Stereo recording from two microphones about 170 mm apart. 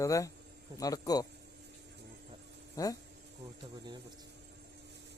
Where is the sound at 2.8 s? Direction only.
20° left (ahead or behind).